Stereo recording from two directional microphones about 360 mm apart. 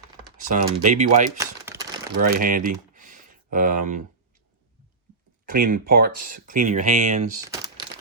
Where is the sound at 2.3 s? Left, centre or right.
Right.